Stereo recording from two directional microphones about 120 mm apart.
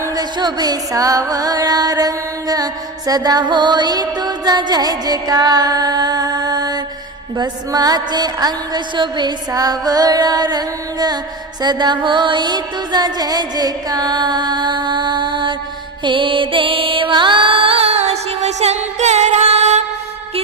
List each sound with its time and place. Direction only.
0.0 s music: 35° right (ahead or behind); by 19.8 s 65° right (ahead or behind)